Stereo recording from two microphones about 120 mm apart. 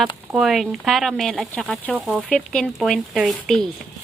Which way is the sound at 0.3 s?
Centre (ahead or behind).